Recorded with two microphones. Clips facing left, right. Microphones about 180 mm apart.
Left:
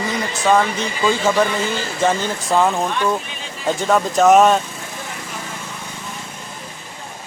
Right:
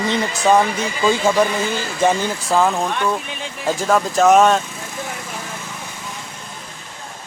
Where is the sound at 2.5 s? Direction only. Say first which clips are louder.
Even; centre (ahead or behind).